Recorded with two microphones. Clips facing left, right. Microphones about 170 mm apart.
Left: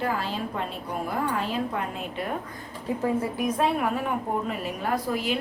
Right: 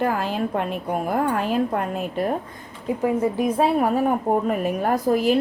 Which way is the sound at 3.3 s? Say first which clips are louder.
Right 5 dB; 25° right (ahead or behind).